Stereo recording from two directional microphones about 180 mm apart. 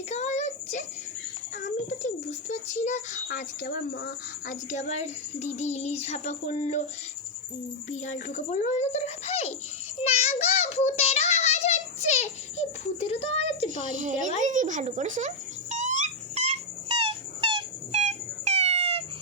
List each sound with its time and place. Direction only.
0.1 s child singing: 40° left (ahead or behind)
1.6 s a sound: 40° left (ahead or behind); by 4.5 s 60° left (ahead or behind)
4.7 s a child's voice: 40° left (ahead or behind)
7.9 s a child's voice: 40° left (ahead or behind)
10.0 s child singing: 35° left (ahead or behind)
14.0 s speech: 45° right (ahead or behind)
15.7 s dog: 45° right (ahead or behind)
17.9 s a sound: 40° right (ahead or behind)